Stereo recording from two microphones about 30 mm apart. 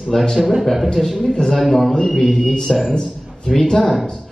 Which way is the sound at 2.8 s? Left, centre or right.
Left.